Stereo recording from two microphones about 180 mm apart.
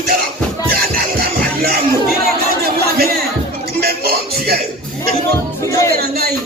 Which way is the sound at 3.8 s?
60° right (ahead or behind).